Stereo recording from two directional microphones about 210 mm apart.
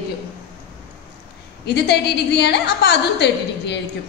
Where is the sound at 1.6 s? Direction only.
50° left (ahead or behind).